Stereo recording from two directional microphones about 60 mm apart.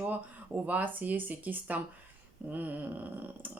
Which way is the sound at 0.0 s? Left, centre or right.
Right.